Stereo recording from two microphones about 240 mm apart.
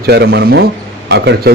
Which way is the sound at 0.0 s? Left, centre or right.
Right.